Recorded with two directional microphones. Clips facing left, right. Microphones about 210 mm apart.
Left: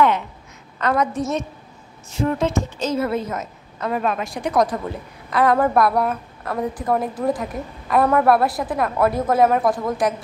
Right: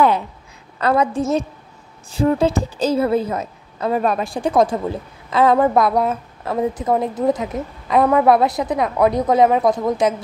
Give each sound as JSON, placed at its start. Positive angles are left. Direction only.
{"t": 0.7, "sound": "a woman's voice", "side_deg": -30}